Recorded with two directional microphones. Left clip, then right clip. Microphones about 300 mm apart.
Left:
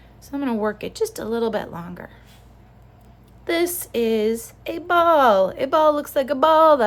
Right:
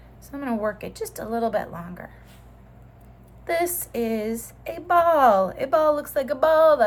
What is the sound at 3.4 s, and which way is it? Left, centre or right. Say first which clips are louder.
A woman's voice: left 2 dB; centre.